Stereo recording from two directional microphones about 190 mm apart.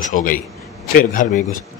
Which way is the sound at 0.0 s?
45° left (ahead or behind).